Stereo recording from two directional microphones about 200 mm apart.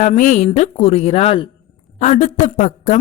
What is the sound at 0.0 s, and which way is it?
A woman's voice, 40° left (ahead or behind).